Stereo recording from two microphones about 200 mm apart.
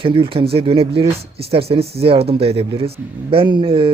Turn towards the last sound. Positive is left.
turn(degrees=-25)  # may be behind; listen again after turning